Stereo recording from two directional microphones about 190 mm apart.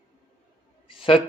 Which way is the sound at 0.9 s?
25° left (ahead or behind).